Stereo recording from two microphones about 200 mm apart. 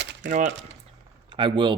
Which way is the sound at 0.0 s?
60° right (ahead or behind).